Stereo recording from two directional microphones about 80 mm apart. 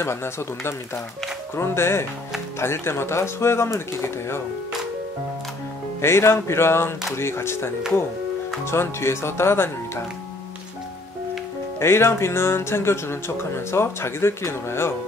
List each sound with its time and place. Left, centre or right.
0.0 s speech: left
5.9 s speech: left
11.8 s speech: left